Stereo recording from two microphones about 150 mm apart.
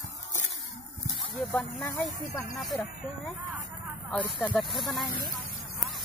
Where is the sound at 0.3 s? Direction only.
55° right (ahead or behind).